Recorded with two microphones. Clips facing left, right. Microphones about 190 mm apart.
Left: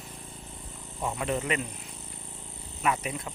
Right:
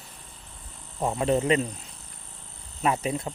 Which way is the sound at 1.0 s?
30° right (ahead or behind).